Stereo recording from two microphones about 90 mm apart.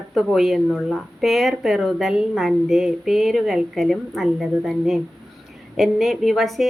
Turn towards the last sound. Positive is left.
turn(degrees=0)  # may be behind; listen again after turning